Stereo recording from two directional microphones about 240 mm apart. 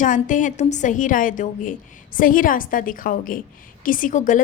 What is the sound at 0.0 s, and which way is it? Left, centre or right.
A woman's voice, left.